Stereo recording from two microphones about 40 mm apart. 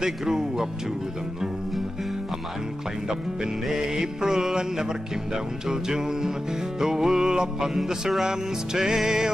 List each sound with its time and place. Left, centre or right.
0.0 s music: centre
3.6 s music: centre